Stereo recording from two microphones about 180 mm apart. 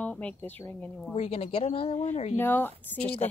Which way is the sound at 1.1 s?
35° left (ahead or behind).